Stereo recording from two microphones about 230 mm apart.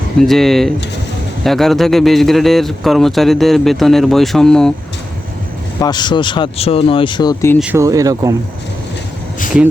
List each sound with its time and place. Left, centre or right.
0.2 s speech: centre
5.8 s speech: centre
7.6 s speech: centre